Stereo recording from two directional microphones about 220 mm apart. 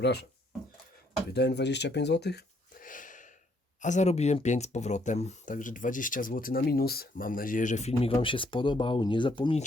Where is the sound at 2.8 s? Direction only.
35° left (ahead or behind).